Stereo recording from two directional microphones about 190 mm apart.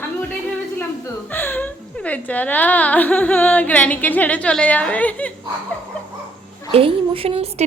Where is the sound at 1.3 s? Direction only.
10° left (ahead or behind).